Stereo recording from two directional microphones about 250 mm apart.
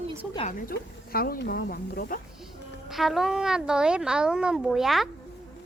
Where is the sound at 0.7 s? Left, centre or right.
Left.